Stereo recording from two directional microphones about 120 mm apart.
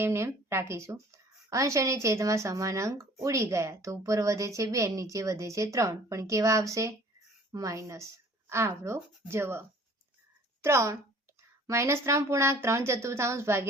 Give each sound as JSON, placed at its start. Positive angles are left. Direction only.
{"t": 0.0, "sound": "a woman's voice", "side_deg": -25}